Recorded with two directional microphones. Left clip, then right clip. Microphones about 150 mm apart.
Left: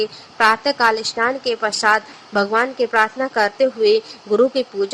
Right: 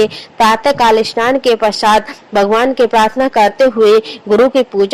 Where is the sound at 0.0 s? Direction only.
35° right (ahead or behind).